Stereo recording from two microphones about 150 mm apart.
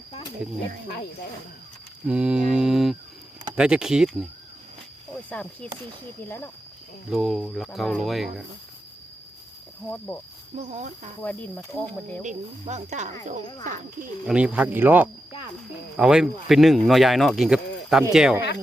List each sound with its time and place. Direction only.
2.0 s speech: 5° right (ahead or behind)
5.3 s speech: 10° left (ahead or behind)
7.1 s speech: centre (ahead or behind)
10.6 s speech: 50° right (ahead or behind)
11.2 s speech: 10° left (ahead or behind)
12.2 s speech: 55° right (ahead or behind)
14.3 s speech: 5° right (ahead or behind)